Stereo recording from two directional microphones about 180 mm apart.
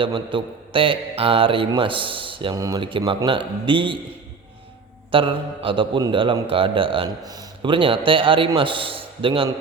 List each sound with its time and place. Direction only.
0.0 s a man's voice: 30° right (ahead or behind)
5.1 s a man's voice: 30° right (ahead or behind)